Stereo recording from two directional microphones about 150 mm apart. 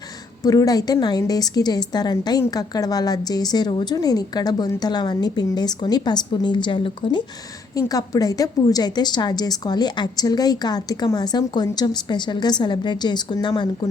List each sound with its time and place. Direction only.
0.4 s a woman's voice: 25° left (ahead or behind)